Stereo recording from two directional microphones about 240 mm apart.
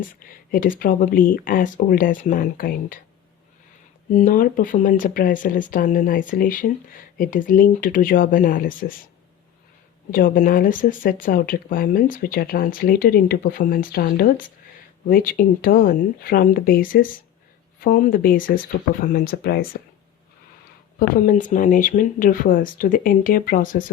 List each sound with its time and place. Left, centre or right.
0.0 s speech: left
4.1 s speech: left
10.1 s speech: left
21.2 s speech: left